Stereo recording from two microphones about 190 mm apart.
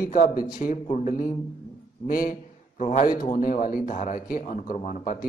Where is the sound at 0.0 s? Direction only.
45° left (ahead or behind).